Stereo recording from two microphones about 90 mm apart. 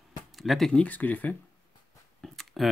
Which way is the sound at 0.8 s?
20° left (ahead or behind).